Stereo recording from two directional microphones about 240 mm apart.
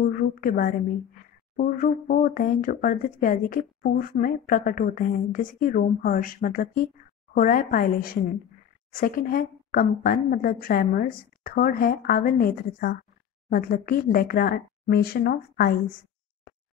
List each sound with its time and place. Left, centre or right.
0.0 s a woman's voice: left